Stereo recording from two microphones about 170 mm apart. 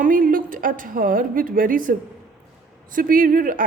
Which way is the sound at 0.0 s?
55° right (ahead or behind).